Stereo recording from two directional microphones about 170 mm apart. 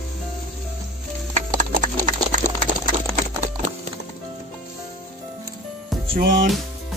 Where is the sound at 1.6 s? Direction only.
50° right (ahead or behind).